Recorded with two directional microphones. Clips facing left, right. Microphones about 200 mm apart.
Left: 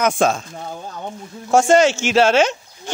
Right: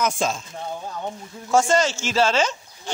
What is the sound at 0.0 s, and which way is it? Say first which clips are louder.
Speech: left 6 dB; 65° left (ahead or behind).